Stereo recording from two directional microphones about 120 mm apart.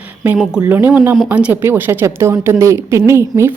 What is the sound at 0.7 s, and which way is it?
A woman's voice, 15° right (ahead or behind).